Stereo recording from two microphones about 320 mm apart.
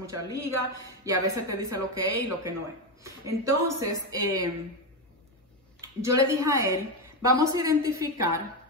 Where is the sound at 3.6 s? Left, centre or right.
Centre.